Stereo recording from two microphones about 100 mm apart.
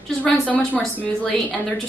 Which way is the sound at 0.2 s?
15° left (ahead or behind).